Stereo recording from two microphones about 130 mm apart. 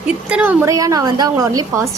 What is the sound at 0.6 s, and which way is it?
A woman's voice, 25° right (ahead or behind).